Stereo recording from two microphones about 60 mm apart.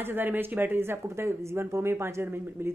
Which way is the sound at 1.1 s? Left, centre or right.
Right.